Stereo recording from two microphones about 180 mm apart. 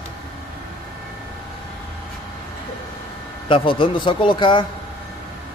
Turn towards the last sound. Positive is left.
turn(degrees=25)  # may be behind; listen again after turning